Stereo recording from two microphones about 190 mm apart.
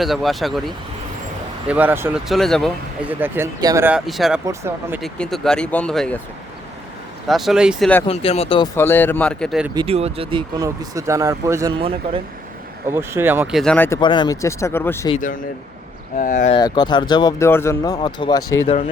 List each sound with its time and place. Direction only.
0.0 s speech: centre (ahead or behind)
3.1 s speech: 10° right (ahead or behind)
4.4 s speech: 15° right (ahead or behind)
4.9 s speech: 5° left (ahead or behind)
7.3 s speech: centre (ahead or behind)
8.0 s speech: 30° left (ahead or behind)
8.7 s speech: 10° left (ahead or behind)
9.7 s speech: 30° right (ahead or behind)
12.9 s speech: 10° right (ahead or behind)
13.6 s speech: 5° left (ahead or behind)
14.0 s speech: 25° left (ahead or behind)
15.2 s speech: 45° left (ahead or behind)
16.6 s speech: 20° left (ahead or behind)
18.6 s speech: 35° left (ahead or behind)